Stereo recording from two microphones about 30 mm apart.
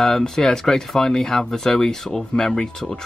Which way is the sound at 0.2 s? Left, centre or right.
Centre.